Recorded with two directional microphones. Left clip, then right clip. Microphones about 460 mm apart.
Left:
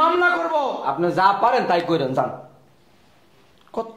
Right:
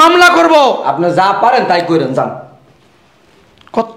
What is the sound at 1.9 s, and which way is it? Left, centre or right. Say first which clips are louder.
Speech: right 9 dB; centre.